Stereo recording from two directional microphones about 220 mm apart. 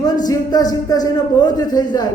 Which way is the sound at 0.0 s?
15° left (ahead or behind).